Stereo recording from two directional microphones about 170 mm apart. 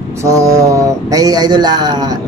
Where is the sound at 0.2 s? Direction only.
15° right (ahead or behind).